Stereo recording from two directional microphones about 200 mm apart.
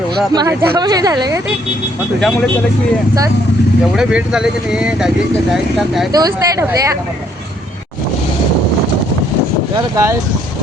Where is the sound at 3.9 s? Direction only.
5° right (ahead or behind).